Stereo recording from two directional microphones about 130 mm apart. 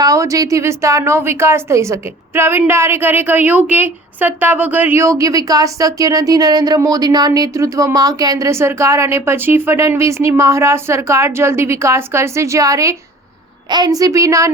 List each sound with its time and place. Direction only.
0.0 s a woman's voice: 25° right (ahead or behind)